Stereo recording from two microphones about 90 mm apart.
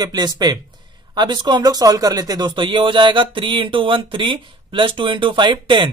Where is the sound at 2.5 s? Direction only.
65° right (ahead or behind).